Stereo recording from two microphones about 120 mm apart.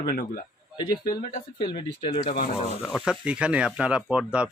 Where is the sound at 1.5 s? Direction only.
45° left (ahead or behind).